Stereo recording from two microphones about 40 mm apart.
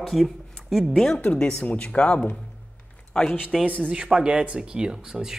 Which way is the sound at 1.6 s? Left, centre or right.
Left.